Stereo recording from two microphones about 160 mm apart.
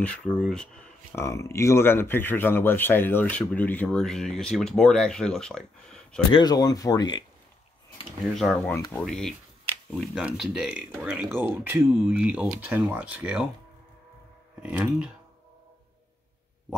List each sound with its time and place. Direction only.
0.0 s speech: 5° left (ahead or behind)
1.1 s speech: 20° left (ahead or behind)
6.3 s speech: 25° left (ahead or behind)
8.4 s speech: 5° left (ahead or behind)
8.7 s speech: 15° left (ahead or behind)
9.0 s speech: centre (ahead or behind)
14.6 s speech: 5° right (ahead or behind)